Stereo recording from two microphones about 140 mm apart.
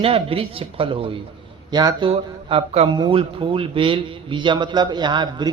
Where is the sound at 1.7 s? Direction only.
30° right (ahead or behind).